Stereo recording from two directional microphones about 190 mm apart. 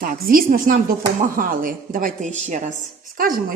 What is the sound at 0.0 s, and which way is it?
A woman's voice, 50° right (ahead or behind).